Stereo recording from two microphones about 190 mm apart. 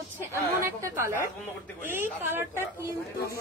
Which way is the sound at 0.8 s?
15° right (ahead or behind).